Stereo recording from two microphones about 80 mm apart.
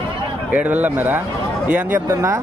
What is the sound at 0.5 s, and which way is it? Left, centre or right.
A man's voice, centre.